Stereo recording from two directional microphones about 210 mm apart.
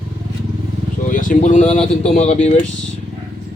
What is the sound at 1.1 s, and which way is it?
Speech, 40° left (ahead or behind).